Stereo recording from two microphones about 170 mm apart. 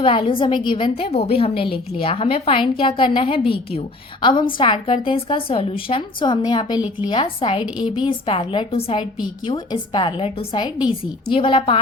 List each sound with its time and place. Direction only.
0.0 s a woman's voice: 30° left (ahead or behind)